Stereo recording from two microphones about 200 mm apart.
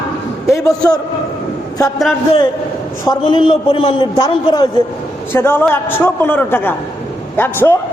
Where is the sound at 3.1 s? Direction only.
25° left (ahead or behind).